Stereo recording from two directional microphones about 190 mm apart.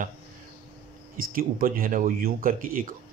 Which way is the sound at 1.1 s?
50° right (ahead or behind).